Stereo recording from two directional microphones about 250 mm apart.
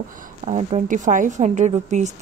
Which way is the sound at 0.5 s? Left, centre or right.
Right.